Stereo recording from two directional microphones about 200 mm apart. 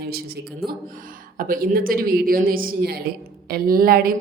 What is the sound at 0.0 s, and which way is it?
A woman's voice, 50° right (ahead or behind).